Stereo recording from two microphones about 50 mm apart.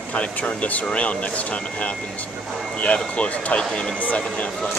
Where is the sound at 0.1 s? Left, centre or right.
Left.